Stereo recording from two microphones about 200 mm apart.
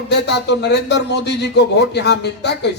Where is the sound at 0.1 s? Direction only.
60° left (ahead or behind).